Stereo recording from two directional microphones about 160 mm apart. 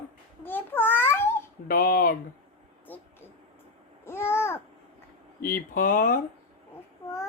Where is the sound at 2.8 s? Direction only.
10° left (ahead or behind).